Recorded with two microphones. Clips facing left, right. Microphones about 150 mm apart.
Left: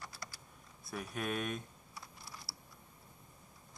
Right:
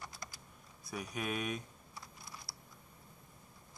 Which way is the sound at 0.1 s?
20° right (ahead or behind).